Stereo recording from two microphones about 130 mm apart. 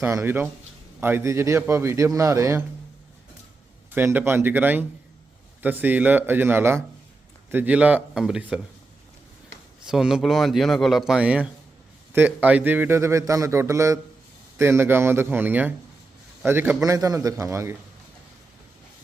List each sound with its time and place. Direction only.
0.0 s a man's voice: 20° right (ahead or behind)
3.9 s speech: 15° right (ahead or behind)
9.8 s a man's voice: 5° right (ahead or behind); by 17.7 s 20° right (ahead or behind)